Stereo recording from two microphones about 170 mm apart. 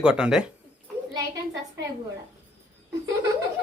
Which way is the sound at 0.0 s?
5° right (ahead or behind).